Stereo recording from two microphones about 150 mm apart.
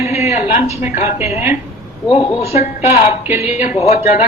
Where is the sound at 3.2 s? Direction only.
20° right (ahead or behind).